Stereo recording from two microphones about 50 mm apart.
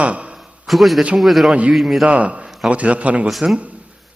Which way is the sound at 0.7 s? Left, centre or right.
Centre.